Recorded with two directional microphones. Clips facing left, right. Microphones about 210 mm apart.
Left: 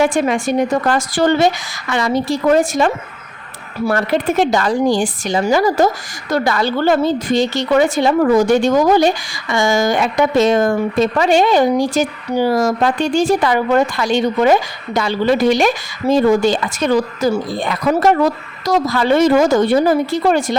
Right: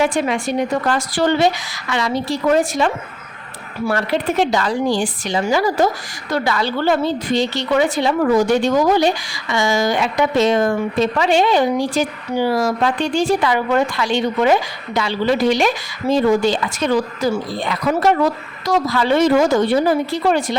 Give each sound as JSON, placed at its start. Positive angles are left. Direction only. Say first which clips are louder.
{"t": 0.0, "sound": "a woman's voice", "louder": "left 3 dB", "side_deg": 45}